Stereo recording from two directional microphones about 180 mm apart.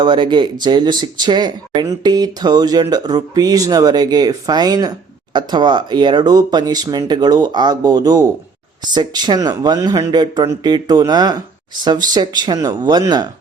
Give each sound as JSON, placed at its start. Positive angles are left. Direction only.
{"t": 0.0, "sound": "speech", "side_deg": -25}